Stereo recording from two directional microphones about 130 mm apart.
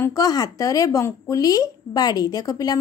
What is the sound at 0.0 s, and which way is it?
A woman's voice, 25° left (ahead or behind).